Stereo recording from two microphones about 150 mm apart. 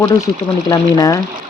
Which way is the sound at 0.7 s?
25° left (ahead or behind).